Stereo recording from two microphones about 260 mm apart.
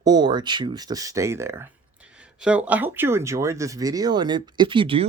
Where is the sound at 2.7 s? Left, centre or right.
Centre.